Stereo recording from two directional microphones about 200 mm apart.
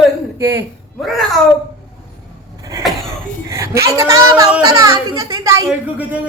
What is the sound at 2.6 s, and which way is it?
Cough, 15° right (ahead or behind).